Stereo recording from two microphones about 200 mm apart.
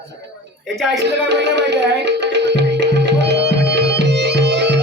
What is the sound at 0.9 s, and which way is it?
Tabla, 60° right (ahead or behind).